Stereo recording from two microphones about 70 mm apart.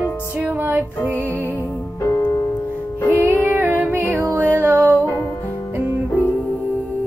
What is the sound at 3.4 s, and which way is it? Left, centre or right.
Music, right.